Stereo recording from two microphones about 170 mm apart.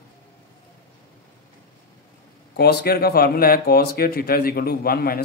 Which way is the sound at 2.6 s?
70° left (ahead or behind).